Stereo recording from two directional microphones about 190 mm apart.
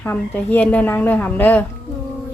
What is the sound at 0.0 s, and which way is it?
A woman's voice, 10° left (ahead or behind).